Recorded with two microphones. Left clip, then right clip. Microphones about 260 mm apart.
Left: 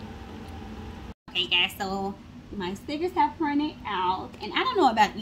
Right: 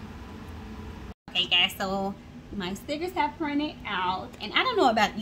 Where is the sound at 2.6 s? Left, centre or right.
Right.